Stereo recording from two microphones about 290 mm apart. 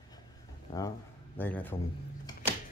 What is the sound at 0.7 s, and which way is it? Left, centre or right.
Speech, centre.